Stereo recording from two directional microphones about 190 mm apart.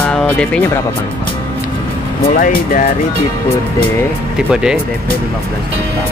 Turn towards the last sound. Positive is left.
turn(degrees=-5)  # may be behind; listen again after turning